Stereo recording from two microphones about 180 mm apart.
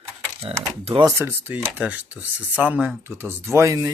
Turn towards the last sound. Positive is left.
turn(degrees=-20)  # may be behind; listen again after turning